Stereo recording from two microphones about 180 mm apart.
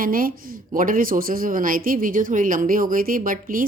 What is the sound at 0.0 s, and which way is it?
Speech, 50° right (ahead or behind).